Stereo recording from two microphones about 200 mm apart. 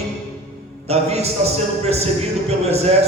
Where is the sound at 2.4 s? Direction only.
30° right (ahead or behind).